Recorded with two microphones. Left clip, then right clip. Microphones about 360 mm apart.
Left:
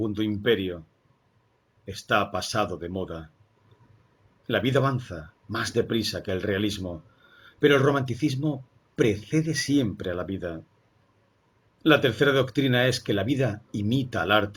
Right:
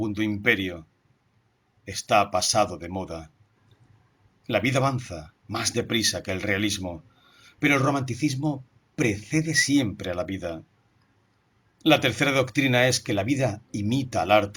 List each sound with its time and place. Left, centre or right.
0.2 s speech: centre
1.8 s speech: centre
4.4 s speech: centre
11.8 s speech: centre